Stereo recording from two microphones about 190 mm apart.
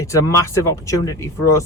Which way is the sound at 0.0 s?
15° left (ahead or behind).